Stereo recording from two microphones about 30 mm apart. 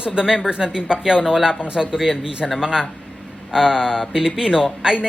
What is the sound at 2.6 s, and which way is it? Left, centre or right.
Speech, right.